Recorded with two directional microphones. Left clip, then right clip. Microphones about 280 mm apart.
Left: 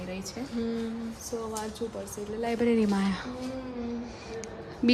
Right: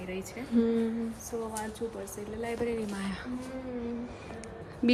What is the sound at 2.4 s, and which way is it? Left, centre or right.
Speech, left.